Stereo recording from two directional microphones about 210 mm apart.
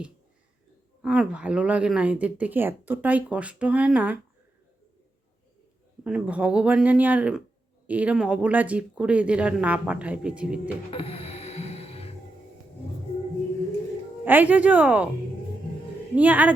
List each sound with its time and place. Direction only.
1.0 s speech: 5° right (ahead or behind)
6.1 s speech: 5° right (ahead or behind)
10.9 s music: 30° left (ahead or behind)
14.3 s speech: 5° right (ahead or behind)
16.1 s speech: 5° right (ahead or behind)